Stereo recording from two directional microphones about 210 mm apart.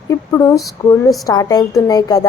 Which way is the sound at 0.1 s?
15° left (ahead or behind).